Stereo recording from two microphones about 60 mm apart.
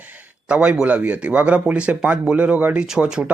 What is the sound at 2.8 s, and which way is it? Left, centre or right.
Speech, centre.